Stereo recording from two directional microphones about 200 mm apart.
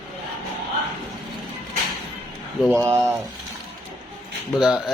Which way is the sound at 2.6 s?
15° right (ahead or behind).